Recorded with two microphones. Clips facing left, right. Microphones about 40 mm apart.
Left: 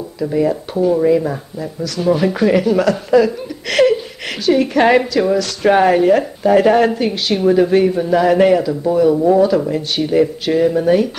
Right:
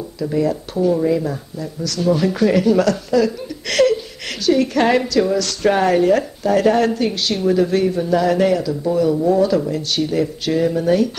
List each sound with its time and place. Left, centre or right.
0.2 s a woman's voice: centre
3.6 s a sound: centre
4.5 s a woman's voice: centre